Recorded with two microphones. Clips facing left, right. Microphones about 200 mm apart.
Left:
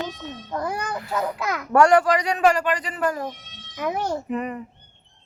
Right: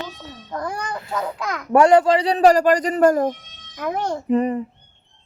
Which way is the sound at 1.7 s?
20° right (ahead or behind).